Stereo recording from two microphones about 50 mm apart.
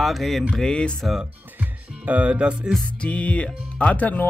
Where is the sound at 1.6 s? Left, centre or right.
Right.